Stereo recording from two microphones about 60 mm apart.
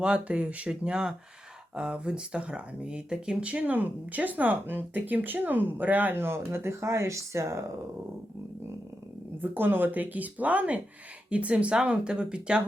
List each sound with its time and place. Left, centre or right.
0.0 s speech: centre; by 7.6 s right
9.4 s speech: right; by 12.6 s centre